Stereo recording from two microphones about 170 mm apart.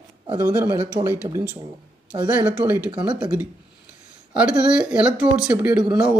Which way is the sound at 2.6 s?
10° right (ahead or behind).